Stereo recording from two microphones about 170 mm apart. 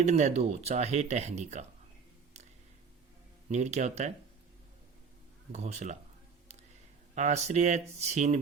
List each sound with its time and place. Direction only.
0.0 s speech: 40° right (ahead or behind)
3.5 s speech: 40° right (ahead or behind)
5.5 s speech: 40° right (ahead or behind)
7.2 s speech: 40° right (ahead or behind)